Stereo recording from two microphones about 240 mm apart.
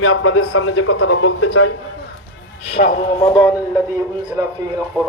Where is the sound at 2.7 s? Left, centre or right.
Left.